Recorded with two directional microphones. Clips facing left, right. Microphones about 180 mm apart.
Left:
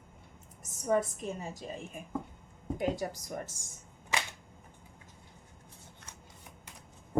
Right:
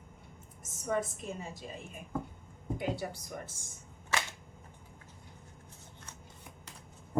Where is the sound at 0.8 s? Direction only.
40° left (ahead or behind).